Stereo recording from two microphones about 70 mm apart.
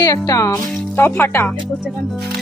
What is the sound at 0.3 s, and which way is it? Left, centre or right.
Speech, left.